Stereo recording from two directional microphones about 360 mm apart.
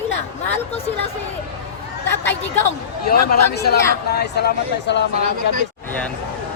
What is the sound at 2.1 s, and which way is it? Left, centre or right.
Speech, centre.